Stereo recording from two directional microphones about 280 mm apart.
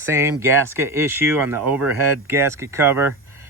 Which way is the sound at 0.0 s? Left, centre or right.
Centre.